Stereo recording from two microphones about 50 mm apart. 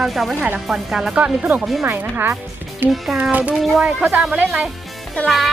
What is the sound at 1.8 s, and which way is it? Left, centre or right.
Speech, right.